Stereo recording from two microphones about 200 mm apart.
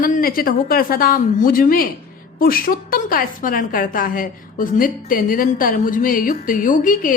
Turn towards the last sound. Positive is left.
turn(degrees=40)  # may be behind; listen again after turning